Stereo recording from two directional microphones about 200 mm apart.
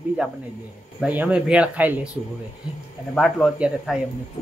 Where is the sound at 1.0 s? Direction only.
5° right (ahead or behind).